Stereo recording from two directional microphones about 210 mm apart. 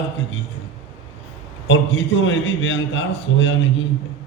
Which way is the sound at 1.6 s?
65° left (ahead or behind).